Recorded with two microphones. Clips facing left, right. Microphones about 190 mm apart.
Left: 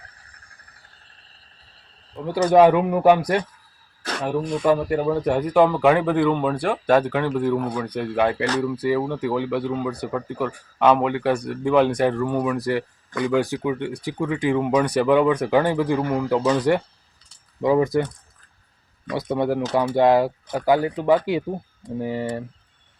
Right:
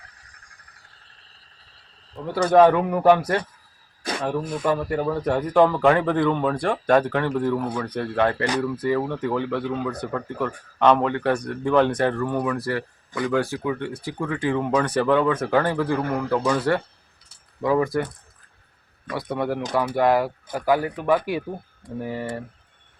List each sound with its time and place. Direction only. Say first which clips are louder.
2.1 s speech: left 1 dB; 15° left (ahead or behind)
4.6 s speech: left 4 dB; 15° left (ahead or behind)
19.1 s speech: left 3 dB; 25° left (ahead or behind)